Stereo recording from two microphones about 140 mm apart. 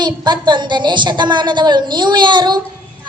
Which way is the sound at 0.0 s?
30° right (ahead or behind).